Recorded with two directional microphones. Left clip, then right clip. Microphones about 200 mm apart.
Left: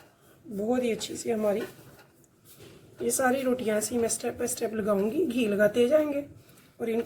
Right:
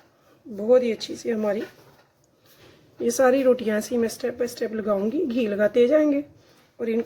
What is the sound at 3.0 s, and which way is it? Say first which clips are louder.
A woman's voice: right 7 dB; 45° right (ahead or behind).